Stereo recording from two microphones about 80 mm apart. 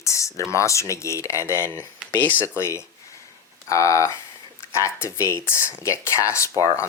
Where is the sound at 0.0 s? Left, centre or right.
Left.